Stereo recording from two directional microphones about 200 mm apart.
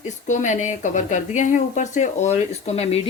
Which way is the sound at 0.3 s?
35° left (ahead or behind).